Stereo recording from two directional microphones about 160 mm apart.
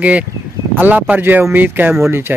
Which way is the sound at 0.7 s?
10° right (ahead or behind).